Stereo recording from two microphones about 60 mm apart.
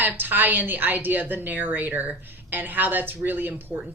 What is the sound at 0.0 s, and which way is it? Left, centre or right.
Speech, right.